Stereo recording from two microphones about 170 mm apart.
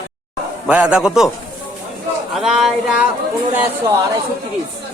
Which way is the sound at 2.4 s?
Centre (ahead or behind).